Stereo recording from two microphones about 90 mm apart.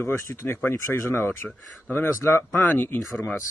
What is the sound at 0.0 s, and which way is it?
Speech, 25° left (ahead or behind).